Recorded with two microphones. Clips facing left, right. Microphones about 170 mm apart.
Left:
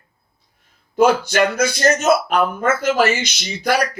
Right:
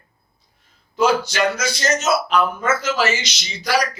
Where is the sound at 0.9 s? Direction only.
55° left (ahead or behind).